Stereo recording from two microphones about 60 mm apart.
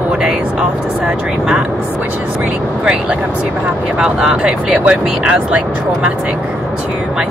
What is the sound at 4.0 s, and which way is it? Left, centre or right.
Speech, centre.